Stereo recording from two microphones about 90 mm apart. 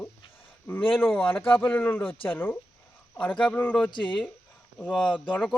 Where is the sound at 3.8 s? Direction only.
60° left (ahead or behind).